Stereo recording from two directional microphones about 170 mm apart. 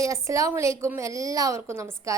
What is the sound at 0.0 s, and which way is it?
A woman's voice, 20° right (ahead or behind).